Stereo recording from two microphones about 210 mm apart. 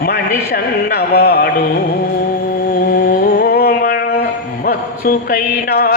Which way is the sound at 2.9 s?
50° left (ahead or behind).